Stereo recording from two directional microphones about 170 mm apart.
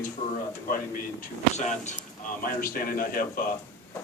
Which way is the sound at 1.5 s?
45° left (ahead or behind).